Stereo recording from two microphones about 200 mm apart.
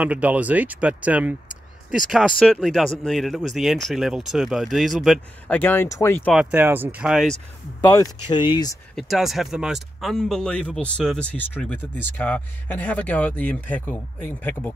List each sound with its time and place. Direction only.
0.0 s speech: 5° right (ahead or behind)
5.6 s speech: 10° left (ahead or behind)
6.3 s speech: 10° right (ahead or behind)
7.8 s speech: 15° left (ahead or behind)
8.9 s speech: centre (ahead or behind)